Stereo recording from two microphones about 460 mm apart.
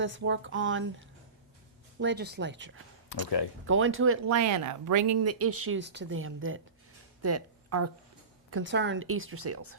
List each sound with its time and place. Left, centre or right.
0.0 s speech: right
2.0 s speech: right
3.1 s speech: left
3.7 s speech: right